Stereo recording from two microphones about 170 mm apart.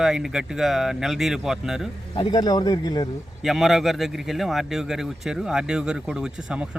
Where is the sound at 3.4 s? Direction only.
Centre (ahead or behind).